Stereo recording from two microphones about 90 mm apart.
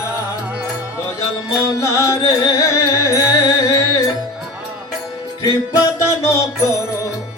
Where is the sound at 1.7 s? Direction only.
35° left (ahead or behind).